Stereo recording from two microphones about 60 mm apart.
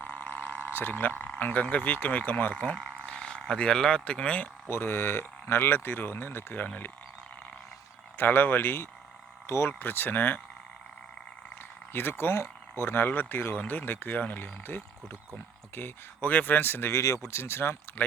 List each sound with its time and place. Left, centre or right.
0.0 s a sound: left
0.7 s a sound: left
0.9 s speech: left
4.7 s speech: left
8.2 s speech: left
11.9 s speech: left
16.9 s speech: left
17.3 s speech: left